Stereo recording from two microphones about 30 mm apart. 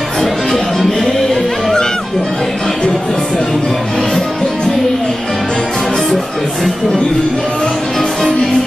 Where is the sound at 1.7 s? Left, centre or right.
Left.